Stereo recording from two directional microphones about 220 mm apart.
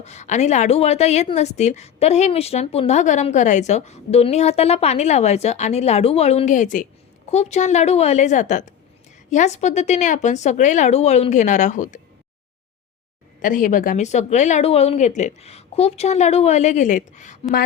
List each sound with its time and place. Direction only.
0.0 s a woman's voice: 30° left (ahead or behind)
13.4 s speech: 35° left (ahead or behind)